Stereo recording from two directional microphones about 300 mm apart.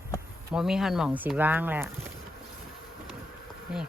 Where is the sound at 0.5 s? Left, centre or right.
Centre.